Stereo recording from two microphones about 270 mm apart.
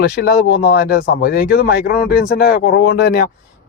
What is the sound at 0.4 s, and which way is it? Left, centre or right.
Speech, left.